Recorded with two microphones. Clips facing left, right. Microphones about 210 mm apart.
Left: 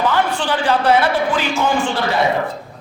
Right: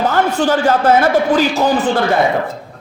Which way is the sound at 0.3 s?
45° right (ahead or behind).